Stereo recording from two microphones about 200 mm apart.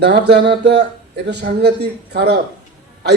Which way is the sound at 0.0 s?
55° right (ahead or behind).